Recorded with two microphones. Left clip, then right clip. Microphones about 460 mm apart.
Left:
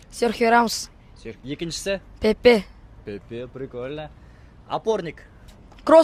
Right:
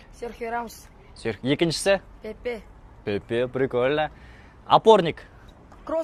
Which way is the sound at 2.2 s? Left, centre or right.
Left.